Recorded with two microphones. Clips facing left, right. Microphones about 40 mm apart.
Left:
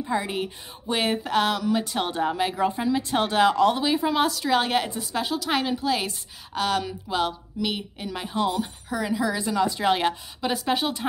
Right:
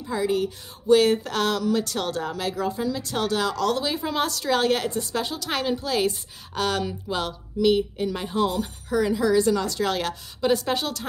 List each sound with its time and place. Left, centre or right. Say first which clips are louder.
0.0 s speech: right 2 dB; left
3.8 s a woman's voice: left 3 dB; centre
10.4 s a woman's voice: right 2 dB; centre